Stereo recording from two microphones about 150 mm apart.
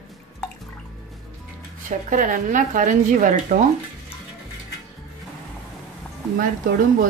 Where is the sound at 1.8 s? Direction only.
60° right (ahead or behind).